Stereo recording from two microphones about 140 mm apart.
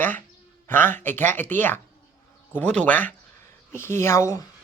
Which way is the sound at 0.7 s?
15° left (ahead or behind).